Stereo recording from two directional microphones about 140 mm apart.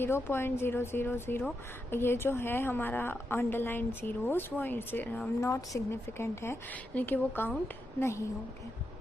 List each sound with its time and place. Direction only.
0.0 s a woman's voice: 15° left (ahead or behind)